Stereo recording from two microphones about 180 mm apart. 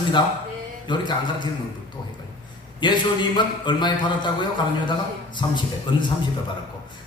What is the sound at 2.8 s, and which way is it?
A man's voice, 25° left (ahead or behind).